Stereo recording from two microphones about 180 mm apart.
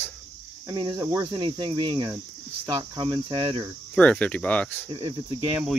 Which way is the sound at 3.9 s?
5° left (ahead or behind).